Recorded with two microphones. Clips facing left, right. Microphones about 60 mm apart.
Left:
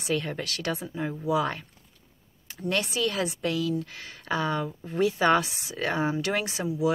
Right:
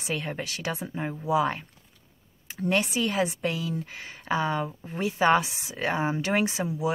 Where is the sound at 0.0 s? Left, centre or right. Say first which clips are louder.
Left 2 dB; centre.